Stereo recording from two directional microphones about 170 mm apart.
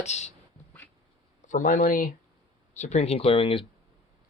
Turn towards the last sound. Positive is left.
turn(degrees=30)  # may be behind; listen again after turning